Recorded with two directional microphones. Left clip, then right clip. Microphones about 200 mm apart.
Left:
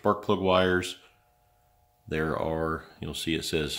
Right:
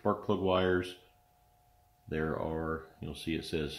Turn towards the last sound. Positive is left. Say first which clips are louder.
# left 7 dB
turn(degrees=45)  # may be behind; listen again after turning